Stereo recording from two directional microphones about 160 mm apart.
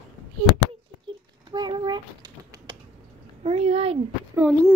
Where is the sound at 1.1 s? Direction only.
30° right (ahead or behind).